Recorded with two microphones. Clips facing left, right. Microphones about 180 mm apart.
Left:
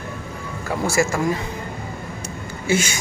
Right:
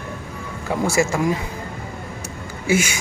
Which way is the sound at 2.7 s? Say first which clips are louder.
Right 1 dB; 10° right (ahead or behind).